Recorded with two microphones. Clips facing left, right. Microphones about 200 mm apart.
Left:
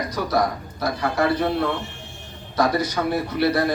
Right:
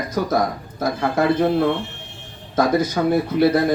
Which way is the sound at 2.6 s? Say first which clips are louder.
Right 3 dB; 50° right (ahead or behind).